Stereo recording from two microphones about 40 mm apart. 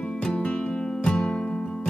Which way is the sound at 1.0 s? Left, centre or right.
Left.